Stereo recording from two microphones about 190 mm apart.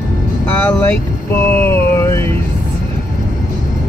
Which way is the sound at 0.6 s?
10° left (ahead or behind).